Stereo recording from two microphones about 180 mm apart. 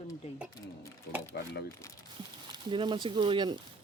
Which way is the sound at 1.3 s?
75° left (ahead or behind).